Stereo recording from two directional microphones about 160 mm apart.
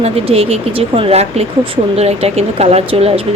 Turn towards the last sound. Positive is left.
turn(degrees=-40)  # may be behind; listen again after turning